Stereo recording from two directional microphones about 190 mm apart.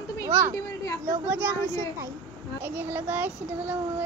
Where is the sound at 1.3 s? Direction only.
15° right (ahead or behind).